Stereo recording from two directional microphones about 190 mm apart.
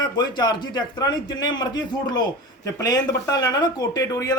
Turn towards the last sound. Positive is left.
turn(degrees=20)  # may be behind; listen again after turning